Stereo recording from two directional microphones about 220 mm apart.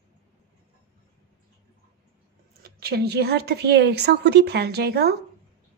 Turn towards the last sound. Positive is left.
turn(degrees=-45)  # may be behind; listen again after turning